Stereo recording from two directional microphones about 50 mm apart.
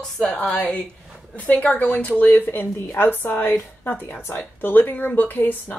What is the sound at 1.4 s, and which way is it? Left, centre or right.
Speech, left.